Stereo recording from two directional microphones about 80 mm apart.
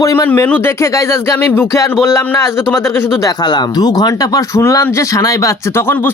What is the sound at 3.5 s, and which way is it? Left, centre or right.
Speech, left.